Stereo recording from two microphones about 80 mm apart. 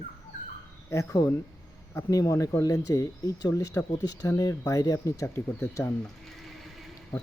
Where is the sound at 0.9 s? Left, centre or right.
Left.